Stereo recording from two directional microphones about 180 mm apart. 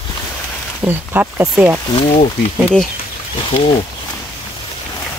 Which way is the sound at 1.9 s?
25° left (ahead or behind).